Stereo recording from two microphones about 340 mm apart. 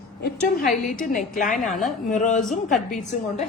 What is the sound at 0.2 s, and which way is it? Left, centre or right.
A woman's voice, left.